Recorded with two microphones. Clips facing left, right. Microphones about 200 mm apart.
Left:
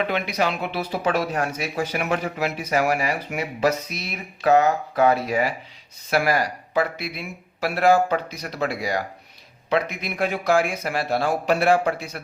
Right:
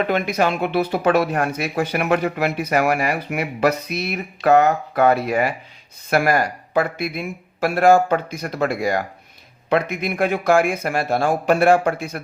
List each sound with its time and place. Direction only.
0.1 s speech: 50° right (ahead or behind)